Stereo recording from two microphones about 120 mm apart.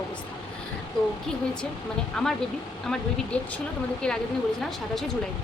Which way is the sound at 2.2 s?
5° left (ahead or behind).